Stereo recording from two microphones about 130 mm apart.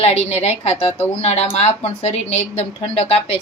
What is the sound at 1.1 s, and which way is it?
A woman's voice, 55° left (ahead or behind).